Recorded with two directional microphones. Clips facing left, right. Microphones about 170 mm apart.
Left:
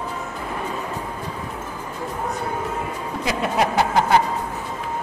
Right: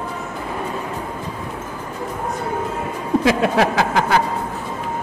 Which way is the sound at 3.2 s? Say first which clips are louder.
Right 4 dB; 90° right.